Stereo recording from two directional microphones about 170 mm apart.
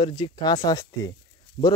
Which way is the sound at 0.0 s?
30° left (ahead or behind).